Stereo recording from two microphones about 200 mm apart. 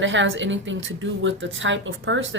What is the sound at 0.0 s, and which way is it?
Speech, 65° right (ahead or behind).